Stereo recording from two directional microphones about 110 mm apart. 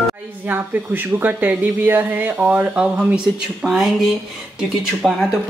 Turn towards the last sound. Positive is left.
turn(degrees=-5)  # may be behind; listen again after turning